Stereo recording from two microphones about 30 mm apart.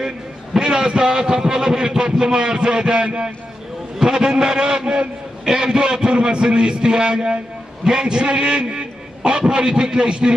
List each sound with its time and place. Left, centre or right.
0.6 s a man's voice: right